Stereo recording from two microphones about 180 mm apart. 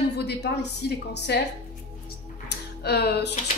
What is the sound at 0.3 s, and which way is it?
A woman's voice, 70° left (ahead or behind).